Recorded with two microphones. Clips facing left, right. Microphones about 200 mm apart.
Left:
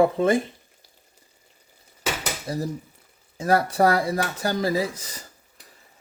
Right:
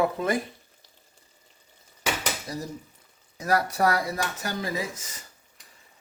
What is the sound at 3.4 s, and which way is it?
Speech, 25° left (ahead or behind).